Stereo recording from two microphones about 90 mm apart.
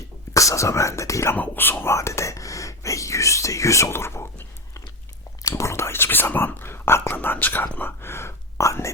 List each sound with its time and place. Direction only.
0.3 s speech: 35° left (ahead or behind)
1.4 s whispering: 20° left (ahead or behind)
5.4 s speech: 35° left (ahead or behind)